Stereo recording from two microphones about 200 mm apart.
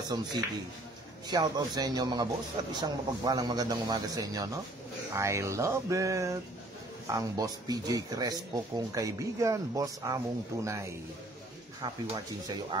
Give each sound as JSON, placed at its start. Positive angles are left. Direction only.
{"t": 0.1, "sound": "a man's voice", "side_deg": -20}